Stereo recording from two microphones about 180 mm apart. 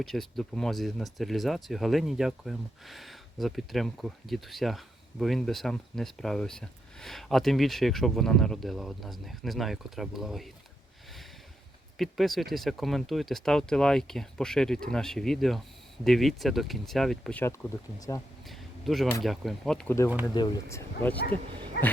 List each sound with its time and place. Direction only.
0.0 s speech: centre (ahead or behind)
11.9 s speech: centre (ahead or behind)
18.1 s speech: 20° left (ahead or behind)
18.4 s a sound: centre (ahead or behind)
19.2 s speech: centre (ahead or behind)
20.2 s speech: 20° left (ahead or behind)
21.7 s dog: 65° left (ahead or behind)